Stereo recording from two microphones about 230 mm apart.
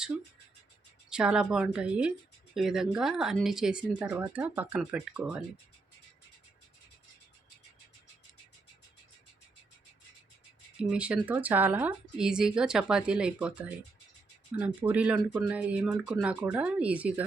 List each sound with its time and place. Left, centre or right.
1.1 s speech: centre
10.8 s speech: centre